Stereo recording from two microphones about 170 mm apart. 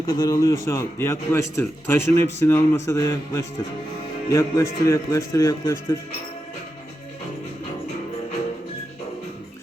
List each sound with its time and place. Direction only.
0.0 s a man's voice: 20° left (ahead or behind)